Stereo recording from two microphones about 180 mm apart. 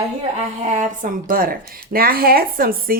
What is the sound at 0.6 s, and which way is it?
A woman's voice, 45° right (ahead or behind).